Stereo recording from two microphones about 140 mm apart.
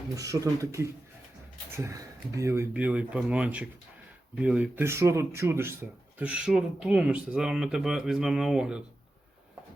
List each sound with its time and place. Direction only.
0.2 s speech: 25° right (ahead or behind); by 8.8 s 5° right (ahead or behind)